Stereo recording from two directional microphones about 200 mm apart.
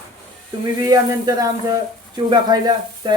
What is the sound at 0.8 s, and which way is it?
Speech, 20° right (ahead or behind).